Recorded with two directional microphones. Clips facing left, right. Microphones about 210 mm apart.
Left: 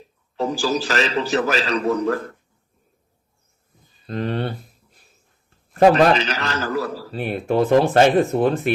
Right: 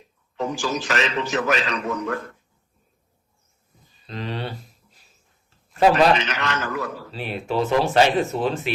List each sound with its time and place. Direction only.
0.3 s a man's voice: 35° left (ahead or behind)
4.0 s a sound: 55° left (ahead or behind)
5.9 s a man's voice: 35° left (ahead or behind)
7.1 s speech: 55° left (ahead or behind)